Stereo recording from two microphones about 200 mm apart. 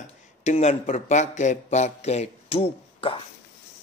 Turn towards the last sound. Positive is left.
turn(degrees=30)  # may be behind; listen again after turning